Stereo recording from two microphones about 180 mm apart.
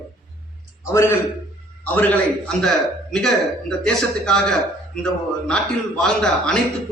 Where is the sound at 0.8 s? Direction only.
15° left (ahead or behind).